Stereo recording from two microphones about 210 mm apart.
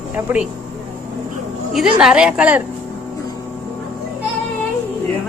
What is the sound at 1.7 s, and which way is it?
Speech, centre (ahead or behind).